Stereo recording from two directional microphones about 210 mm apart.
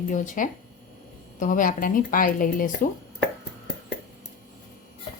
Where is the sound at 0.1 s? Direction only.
40° left (ahead or behind).